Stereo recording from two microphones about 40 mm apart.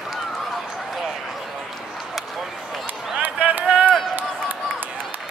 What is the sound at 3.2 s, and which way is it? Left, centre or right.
Run, right.